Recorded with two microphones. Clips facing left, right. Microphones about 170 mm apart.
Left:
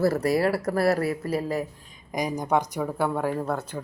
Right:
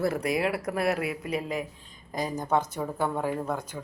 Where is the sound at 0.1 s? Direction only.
15° right (ahead or behind).